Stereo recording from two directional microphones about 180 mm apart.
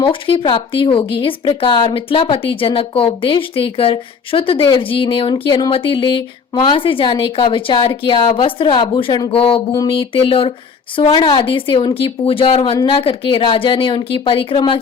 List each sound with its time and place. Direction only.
0.1 s speech: 30° left (ahead or behind)